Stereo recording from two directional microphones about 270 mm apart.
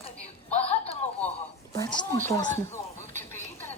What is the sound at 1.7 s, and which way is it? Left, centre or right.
Speech, centre.